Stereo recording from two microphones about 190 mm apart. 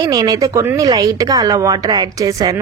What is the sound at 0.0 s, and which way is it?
Speech, 20° right (ahead or behind).